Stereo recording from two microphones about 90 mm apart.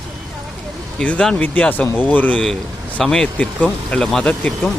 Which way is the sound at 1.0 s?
15° left (ahead or behind).